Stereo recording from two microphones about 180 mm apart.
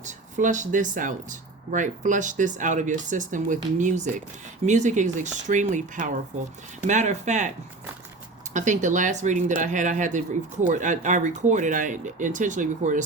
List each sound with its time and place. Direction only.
0.0 s speech: 45° right (ahead or behind)
8.5 s speech: 45° right (ahead or behind)